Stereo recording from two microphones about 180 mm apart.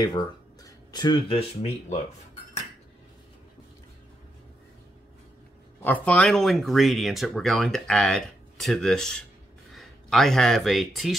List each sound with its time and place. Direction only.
0.0 s speech: 20° left (ahead or behind)
5.8 s speech: 10° left (ahead or behind)